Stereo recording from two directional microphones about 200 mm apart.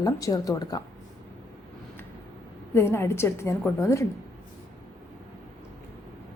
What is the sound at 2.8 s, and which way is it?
A woman's voice, 10° left (ahead or behind).